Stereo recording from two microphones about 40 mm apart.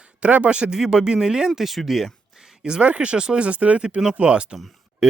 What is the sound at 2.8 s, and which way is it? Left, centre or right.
Speech, right.